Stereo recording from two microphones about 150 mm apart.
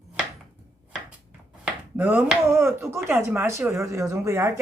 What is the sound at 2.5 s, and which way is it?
Speech, 15° right (ahead or behind).